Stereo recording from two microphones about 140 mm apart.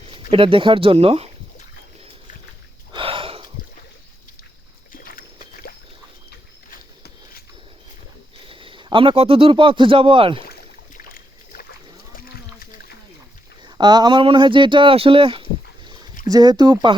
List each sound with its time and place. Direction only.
0.1 s speech: 40° right (ahead or behind)
2.9 s a sound: 40° right (ahead or behind)
4.9 s dog: 85° left
8.4 s speech: 40° right (ahead or behind)
10.4 s boat: 90° left
13.7 s speech: 30° right (ahead or behind)
16.2 s speech: 30° right (ahead or behind)